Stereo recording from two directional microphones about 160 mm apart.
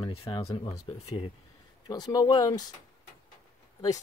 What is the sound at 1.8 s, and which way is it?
Speech, 25° left (ahead or behind).